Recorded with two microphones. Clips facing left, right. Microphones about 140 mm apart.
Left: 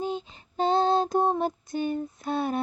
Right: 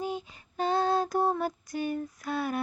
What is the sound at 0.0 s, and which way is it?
Female singing, 25° left (ahead or behind).